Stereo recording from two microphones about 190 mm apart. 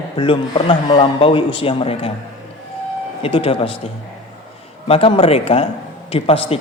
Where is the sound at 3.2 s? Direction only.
30° left (ahead or behind).